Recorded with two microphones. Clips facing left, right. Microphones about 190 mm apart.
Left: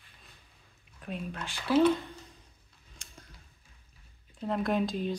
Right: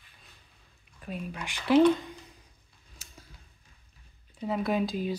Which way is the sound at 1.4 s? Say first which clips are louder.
Right 4 dB; 15° right (ahead or behind).